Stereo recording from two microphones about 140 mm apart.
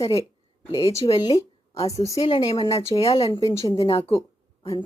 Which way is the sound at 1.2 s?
30° left (ahead or behind).